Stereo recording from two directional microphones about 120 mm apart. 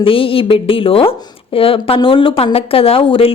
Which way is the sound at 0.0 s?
50° left (ahead or behind).